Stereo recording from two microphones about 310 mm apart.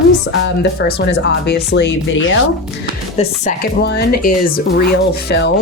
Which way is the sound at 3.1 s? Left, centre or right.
Left.